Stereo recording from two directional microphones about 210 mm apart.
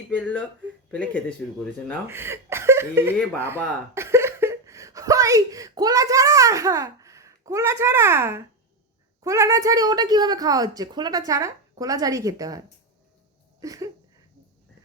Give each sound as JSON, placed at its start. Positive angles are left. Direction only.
{"t": 0.2, "sound": "speech", "side_deg": 5}
{"t": 2.0, "sound": "a woman's voice", "side_deg": -10}
{"t": 13.6, "sound": "a sound", "side_deg": -15}